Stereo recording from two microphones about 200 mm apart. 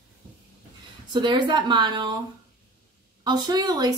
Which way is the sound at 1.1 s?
25° right (ahead or behind).